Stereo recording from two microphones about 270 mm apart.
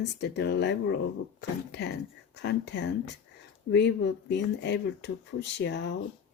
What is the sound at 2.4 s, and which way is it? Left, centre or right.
Speech, left.